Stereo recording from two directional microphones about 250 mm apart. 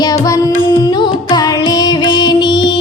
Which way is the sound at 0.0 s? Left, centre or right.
Centre.